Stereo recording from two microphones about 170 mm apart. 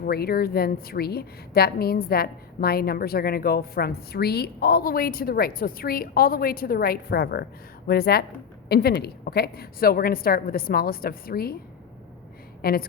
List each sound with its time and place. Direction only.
0.0 s a woman's voice: 65° left (ahead or behind)
12.6 s a woman's voice: 60° left (ahead or behind)